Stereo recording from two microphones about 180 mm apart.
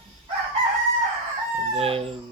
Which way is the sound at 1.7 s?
35° right (ahead or behind).